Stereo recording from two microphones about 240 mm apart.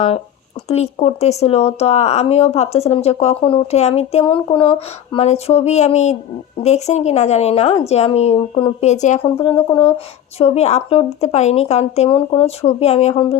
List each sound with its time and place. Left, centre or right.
0.7 s speech: left